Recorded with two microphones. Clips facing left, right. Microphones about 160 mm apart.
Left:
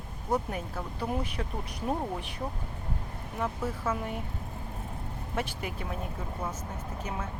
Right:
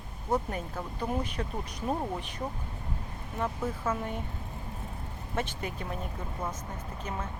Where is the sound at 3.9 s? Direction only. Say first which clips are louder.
Even; 10° left (ahead or behind).